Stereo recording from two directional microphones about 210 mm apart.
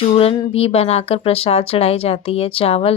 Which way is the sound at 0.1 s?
30° left (ahead or behind).